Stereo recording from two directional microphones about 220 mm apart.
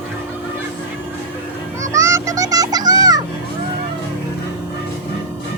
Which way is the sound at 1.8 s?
15° right (ahead or behind).